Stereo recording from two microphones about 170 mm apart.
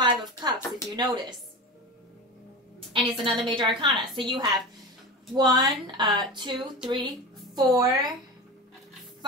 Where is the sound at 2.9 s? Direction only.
30° right (ahead or behind).